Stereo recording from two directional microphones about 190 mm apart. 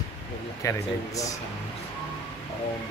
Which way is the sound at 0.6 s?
15° left (ahead or behind).